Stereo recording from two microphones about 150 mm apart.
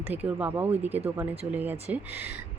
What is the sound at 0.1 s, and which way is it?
Speech, 10° right (ahead or behind).